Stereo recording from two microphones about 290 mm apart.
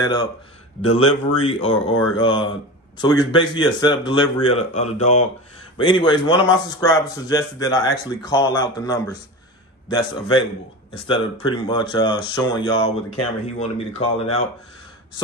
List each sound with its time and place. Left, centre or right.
1.4 s speech: centre